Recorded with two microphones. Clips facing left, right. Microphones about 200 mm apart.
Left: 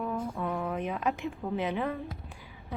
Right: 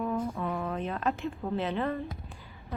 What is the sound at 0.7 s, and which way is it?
A woman's voice, 15° left (ahead or behind).